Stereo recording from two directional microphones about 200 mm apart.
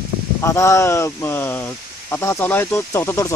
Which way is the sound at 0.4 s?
15° left (ahead or behind).